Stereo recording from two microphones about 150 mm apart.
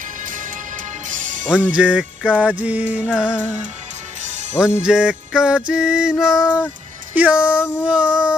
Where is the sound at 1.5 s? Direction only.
10° right (ahead or behind).